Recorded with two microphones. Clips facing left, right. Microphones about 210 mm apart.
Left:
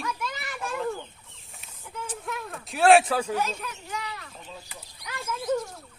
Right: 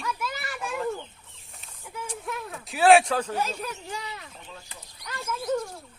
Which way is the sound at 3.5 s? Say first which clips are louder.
Right 2 dB; 35° right (ahead or behind).